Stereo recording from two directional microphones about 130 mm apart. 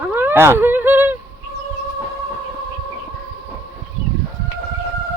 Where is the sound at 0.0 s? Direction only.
15° right (ahead or behind).